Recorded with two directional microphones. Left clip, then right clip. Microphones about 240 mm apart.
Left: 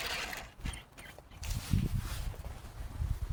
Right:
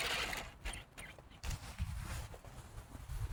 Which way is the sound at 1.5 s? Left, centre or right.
Left.